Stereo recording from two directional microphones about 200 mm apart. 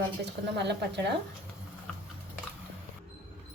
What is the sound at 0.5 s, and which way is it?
Speech, 60° right (ahead or behind).